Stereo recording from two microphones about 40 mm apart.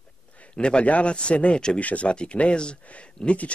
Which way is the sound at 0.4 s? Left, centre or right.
Left.